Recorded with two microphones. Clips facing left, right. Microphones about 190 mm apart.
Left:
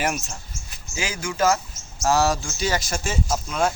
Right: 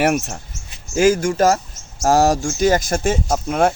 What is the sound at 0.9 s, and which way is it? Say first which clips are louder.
Speech: right 12 dB; 50° right (ahead or behind).